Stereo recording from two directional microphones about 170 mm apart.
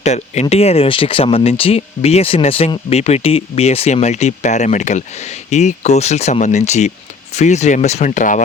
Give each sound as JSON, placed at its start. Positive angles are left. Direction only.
{"t": 0.0, "sound": "speech", "side_deg": 40}